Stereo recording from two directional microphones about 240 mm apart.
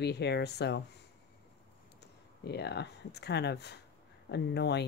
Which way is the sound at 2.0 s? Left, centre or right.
Left.